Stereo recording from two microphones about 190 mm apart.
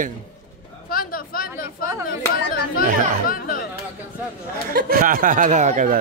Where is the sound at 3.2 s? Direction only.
50° left (ahead or behind).